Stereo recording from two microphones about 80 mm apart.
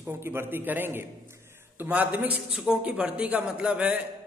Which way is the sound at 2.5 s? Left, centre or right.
Centre.